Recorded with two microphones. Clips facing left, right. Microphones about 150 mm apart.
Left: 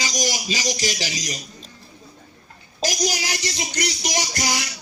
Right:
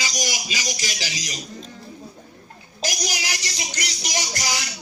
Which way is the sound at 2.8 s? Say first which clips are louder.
Left 5 dB; 45° left (ahead or behind).